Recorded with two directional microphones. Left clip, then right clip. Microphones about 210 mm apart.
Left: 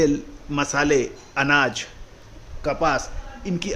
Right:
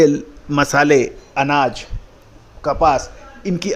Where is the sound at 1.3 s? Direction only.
15° right (ahead or behind).